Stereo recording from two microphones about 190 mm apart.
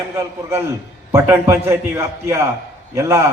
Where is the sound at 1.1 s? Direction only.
10° right (ahead or behind).